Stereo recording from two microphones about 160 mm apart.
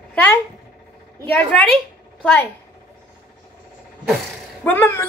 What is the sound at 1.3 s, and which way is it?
Speech, 10° left (ahead or behind).